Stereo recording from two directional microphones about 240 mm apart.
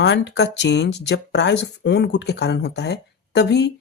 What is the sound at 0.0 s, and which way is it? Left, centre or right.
Speech, left.